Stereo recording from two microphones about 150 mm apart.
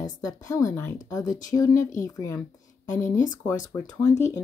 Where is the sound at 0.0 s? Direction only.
25° left (ahead or behind).